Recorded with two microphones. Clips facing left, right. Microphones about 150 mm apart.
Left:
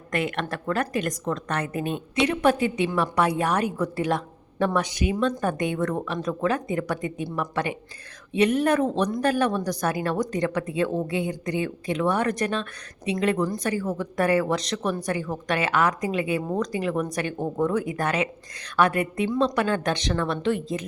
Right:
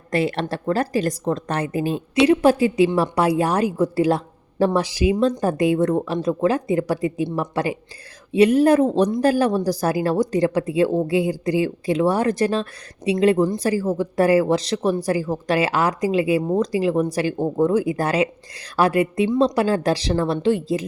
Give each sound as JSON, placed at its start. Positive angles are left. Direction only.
{"t": 0.1, "sound": "a woman's voice", "side_deg": -30}